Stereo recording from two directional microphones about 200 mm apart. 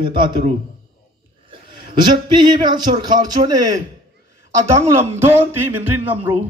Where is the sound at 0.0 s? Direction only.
25° right (ahead or behind).